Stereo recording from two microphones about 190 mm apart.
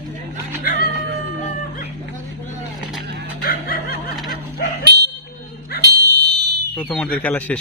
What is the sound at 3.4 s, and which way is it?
Snicker, 50° left (ahead or behind).